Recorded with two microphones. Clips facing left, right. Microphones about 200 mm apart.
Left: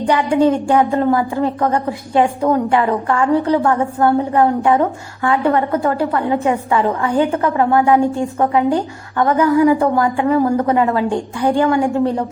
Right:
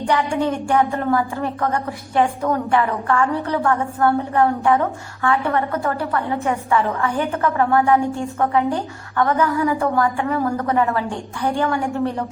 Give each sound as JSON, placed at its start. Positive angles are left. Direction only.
{"t": 0.0, "sound": "a woman's voice", "side_deg": 20}